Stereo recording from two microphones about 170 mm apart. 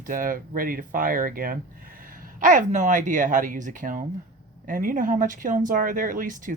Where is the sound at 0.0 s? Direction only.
55° right (ahead or behind).